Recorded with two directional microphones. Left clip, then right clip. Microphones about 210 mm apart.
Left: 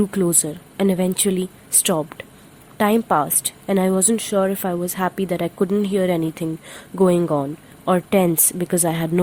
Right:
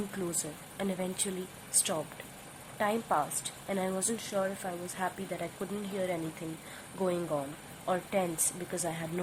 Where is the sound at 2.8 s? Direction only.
50° left (ahead or behind).